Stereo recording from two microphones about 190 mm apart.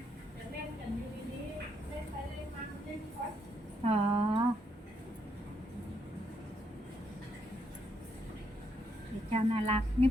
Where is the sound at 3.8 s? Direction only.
30° right (ahead or behind).